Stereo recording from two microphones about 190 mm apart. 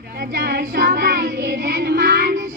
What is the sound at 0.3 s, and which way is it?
Child singing, 50° right (ahead or behind).